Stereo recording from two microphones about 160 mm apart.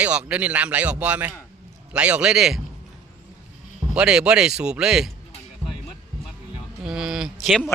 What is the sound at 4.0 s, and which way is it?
Speech, 5° right (ahead or behind).